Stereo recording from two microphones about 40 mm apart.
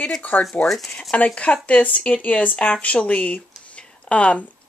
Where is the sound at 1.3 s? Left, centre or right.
Left.